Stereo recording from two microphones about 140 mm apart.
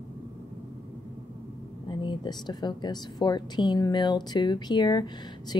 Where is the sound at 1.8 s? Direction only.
35° left (ahead or behind).